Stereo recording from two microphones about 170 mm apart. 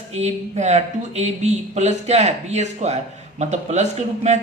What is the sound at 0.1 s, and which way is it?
Speech, 40° right (ahead or behind).